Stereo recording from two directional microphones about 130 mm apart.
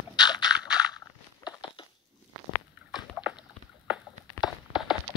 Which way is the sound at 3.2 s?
10° left (ahead or behind).